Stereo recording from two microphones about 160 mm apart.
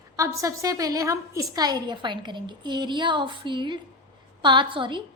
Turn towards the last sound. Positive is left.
turn(degrees=-30)  # may be behind; listen again after turning